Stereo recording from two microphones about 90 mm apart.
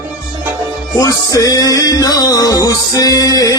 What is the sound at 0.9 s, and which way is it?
Music, 40° left (ahead or behind).